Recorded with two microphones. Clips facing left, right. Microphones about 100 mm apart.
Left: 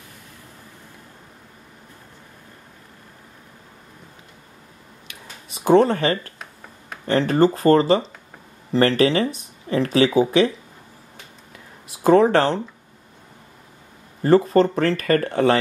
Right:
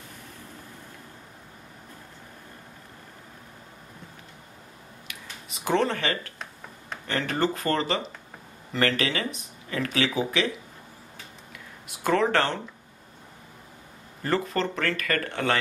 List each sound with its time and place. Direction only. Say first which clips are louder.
5.0 s camera: left 2 dB; 30° left (ahead or behind)
7.1 s speech: left 9 dB; 35° left (ahead or behind)
11.5 s a sound: left 3 dB; 35° left (ahead or behind)
14.2 s speech: left 11 dB; 35° left (ahead or behind)